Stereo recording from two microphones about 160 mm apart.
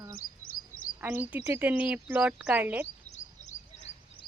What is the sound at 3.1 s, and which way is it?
Bird, 45° left (ahead or behind).